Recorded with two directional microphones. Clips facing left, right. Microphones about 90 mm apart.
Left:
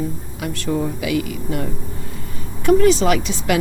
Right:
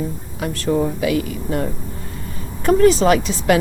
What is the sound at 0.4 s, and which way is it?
Speech, 40° right (ahead or behind).